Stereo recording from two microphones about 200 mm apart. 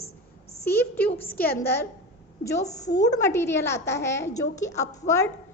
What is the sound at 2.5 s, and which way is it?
Speech, 35° left (ahead or behind).